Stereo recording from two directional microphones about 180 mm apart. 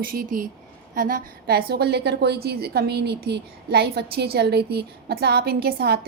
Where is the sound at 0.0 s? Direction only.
55° right (ahead or behind).